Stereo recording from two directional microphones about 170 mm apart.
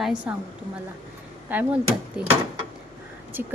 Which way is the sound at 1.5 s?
10° right (ahead or behind).